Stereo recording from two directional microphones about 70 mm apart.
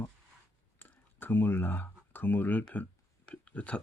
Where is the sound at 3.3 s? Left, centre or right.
Centre.